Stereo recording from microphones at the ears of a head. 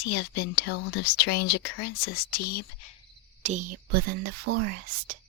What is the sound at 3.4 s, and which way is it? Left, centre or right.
Speech, right.